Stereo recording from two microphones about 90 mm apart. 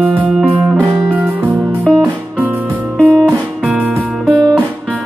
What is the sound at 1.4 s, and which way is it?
Music, 15° right (ahead or behind).